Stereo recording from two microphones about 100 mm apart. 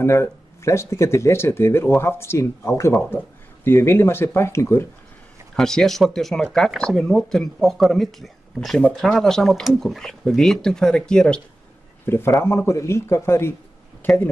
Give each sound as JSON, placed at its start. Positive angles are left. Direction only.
{"t": 0.0, "sound": "speech", "side_deg": 25}
{"t": 5.6, "sound": "speech", "side_deg": 5}
{"t": 12.1, "sound": "speech", "side_deg": 25}